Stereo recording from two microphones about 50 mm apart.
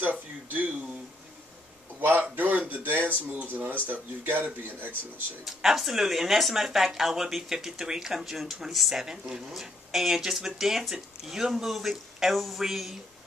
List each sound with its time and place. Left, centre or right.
0.0 s speech: right
2.0 s a sound: right
3.8 s speech: right
5.4 s speech: centre